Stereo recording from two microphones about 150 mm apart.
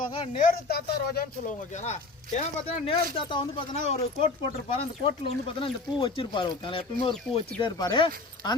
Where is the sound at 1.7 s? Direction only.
50° left (ahead or behind).